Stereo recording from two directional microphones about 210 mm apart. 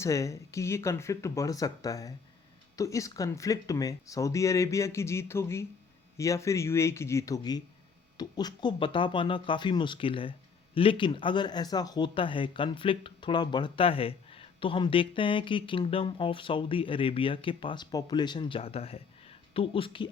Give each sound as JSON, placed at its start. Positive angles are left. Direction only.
{"t": 0.0, "sound": "speech", "side_deg": 15}